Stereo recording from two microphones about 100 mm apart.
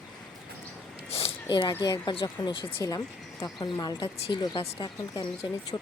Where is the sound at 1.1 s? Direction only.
80° left.